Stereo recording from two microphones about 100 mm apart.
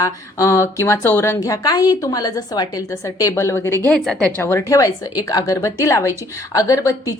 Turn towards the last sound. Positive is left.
turn(degrees=35)  # may be behind; listen again after turning